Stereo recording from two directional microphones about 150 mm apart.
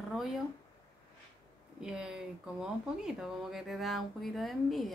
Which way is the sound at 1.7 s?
5° right (ahead or behind).